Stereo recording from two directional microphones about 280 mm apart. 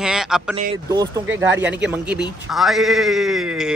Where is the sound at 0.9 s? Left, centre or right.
Centre.